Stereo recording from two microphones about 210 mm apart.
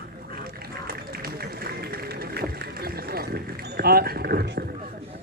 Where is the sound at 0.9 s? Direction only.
45° right (ahead or behind).